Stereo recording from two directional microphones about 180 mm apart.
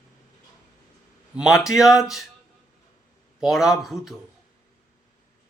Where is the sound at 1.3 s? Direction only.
5° right (ahead or behind).